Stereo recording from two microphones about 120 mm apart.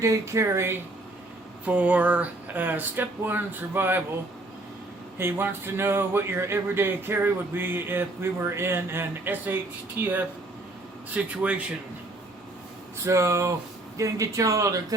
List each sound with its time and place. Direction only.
0.0 s speech: 25° right (ahead or behind)
5.1 s speech: 20° right (ahead or behind)
13.1 s speech: 25° right (ahead or behind)